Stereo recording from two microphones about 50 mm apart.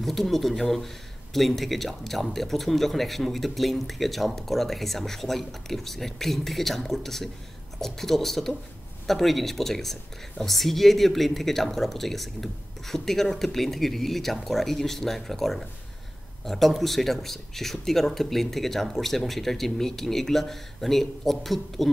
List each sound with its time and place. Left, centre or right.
0.0 s speech: centre